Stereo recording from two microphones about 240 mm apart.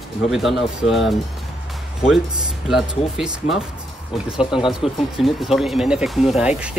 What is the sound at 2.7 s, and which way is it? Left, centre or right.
Speech, centre.